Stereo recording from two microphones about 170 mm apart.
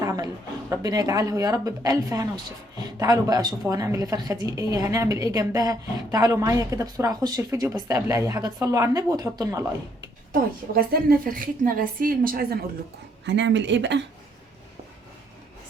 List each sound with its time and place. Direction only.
0.0 s a sound: 20° right (ahead or behind)
0.7 s a woman's voice: 20° right (ahead or behind)
10.3 s a woman's voice: 60° right (ahead or behind)
13.2 s speech: 90° right